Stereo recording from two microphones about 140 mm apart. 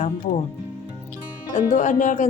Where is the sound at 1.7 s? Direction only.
65° left (ahead or behind).